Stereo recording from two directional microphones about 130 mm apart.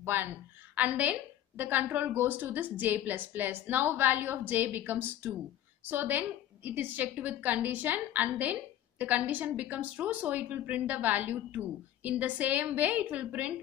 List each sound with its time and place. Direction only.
0.0 s a woman's voice: 15° right (ahead or behind)